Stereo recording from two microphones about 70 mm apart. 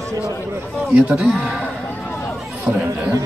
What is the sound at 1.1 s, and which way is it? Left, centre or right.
Speech, centre.